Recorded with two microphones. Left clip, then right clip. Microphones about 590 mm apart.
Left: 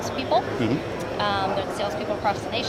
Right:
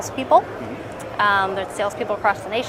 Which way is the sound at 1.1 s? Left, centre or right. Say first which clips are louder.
Right 6 dB; right.